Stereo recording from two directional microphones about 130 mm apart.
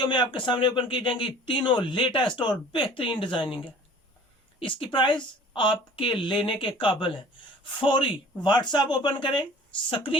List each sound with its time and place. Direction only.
0.0 s a woman's voice: 35° left (ahead or behind)